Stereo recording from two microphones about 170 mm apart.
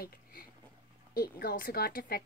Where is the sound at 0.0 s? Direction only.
60° left (ahead or behind).